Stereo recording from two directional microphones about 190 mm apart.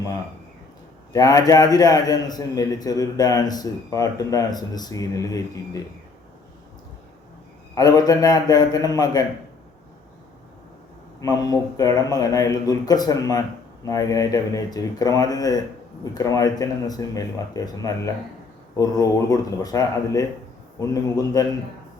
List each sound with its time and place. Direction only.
1.1 s a man's voice: 20° left (ahead or behind)
7.8 s a man's voice: 20° left (ahead or behind)
11.2 s a man's voice: 20° left (ahead or behind)